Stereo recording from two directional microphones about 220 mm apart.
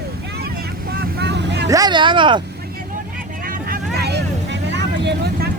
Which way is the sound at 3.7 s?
45° right (ahead or behind).